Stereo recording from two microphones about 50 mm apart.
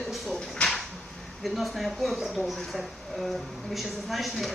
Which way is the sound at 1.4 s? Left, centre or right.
Centre.